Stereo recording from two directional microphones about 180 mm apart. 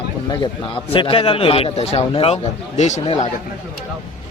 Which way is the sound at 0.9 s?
30° left (ahead or behind).